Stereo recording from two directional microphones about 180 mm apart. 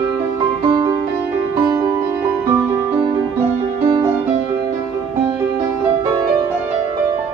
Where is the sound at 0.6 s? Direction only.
25° right (ahead or behind).